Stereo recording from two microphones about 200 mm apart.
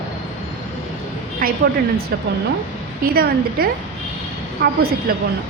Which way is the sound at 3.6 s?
50° right (ahead or behind).